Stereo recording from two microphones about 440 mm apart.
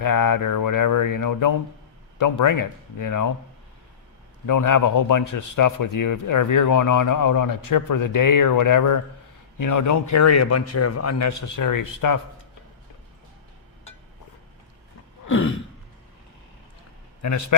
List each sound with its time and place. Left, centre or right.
0.0 s speech: left
4.4 s a man's voice: left
15.3 s throat clearing: left
17.2 s a man's voice: left